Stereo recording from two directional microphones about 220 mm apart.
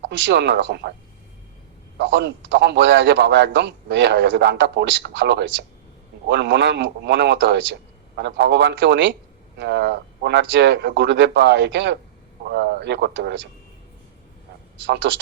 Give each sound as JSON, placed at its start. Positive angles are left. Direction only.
{"t": 0.1, "sound": "a man's voice", "side_deg": -55}
{"t": 2.0, "sound": "a man's voice", "side_deg": -55}
{"t": 14.8, "sound": "a man's voice", "side_deg": -55}